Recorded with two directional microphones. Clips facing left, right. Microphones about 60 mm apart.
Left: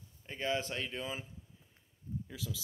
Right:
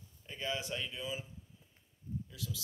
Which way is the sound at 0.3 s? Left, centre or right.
Left.